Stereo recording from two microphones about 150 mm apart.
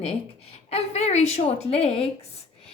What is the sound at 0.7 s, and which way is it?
A woman's voice, 45° left (ahead or behind).